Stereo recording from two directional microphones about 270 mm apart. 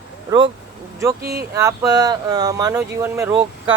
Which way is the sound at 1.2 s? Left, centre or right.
Right.